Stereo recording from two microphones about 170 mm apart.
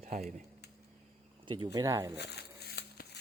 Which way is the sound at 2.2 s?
75° left (ahead or behind).